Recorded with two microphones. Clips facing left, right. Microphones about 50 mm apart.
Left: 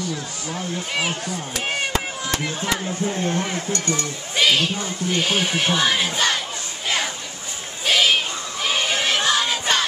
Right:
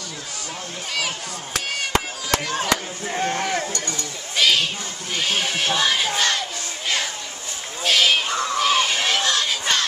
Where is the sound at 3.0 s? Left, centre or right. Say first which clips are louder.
Right 1 dB; right.